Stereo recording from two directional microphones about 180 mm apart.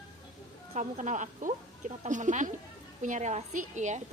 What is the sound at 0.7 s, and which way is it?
A woman's voice, 40° right (ahead or behind).